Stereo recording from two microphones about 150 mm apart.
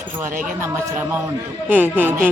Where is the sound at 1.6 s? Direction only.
10° right (ahead or behind).